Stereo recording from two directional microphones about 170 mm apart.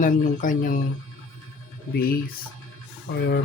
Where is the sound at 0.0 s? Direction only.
50° left (ahead or behind).